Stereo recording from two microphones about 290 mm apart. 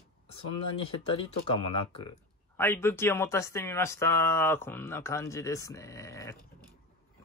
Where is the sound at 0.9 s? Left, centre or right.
Centre.